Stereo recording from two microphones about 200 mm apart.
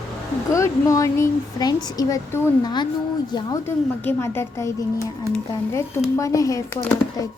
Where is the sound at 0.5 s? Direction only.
15° left (ahead or behind).